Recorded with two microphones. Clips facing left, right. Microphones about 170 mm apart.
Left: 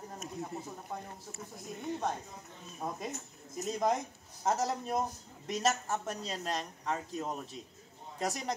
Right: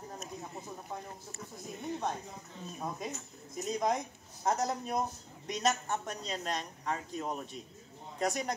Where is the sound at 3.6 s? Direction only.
Centre (ahead or behind).